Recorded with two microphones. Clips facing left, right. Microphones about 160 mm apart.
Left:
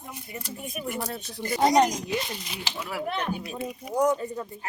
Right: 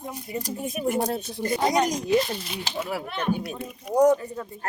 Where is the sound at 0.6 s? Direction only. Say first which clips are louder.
Right 5 dB; 25° right (ahead or behind).